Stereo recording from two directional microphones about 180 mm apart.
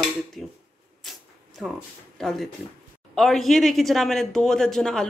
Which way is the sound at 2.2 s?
Centre (ahead or behind).